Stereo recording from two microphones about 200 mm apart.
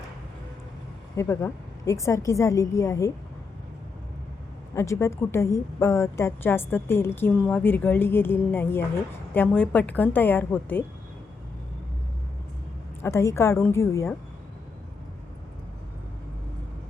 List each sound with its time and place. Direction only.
1.1 s a woman's voice: 15° left (ahead or behind)
4.7 s a woman's voice: 15° left (ahead or behind)
13.0 s a woman's voice: 15° left (ahead or behind)